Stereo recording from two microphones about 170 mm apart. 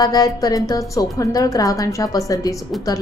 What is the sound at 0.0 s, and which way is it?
A woman's voice, 20° left (ahead or behind).